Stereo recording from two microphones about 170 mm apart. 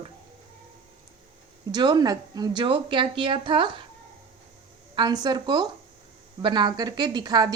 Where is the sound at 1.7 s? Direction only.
25° right (ahead or behind).